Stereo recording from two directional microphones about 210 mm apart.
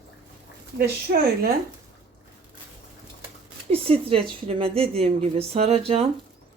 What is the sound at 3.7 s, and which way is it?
Speech, 25° right (ahead or behind).